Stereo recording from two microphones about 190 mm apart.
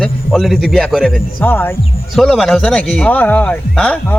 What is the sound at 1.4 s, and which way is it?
A man's voice, 10° left (ahead or behind).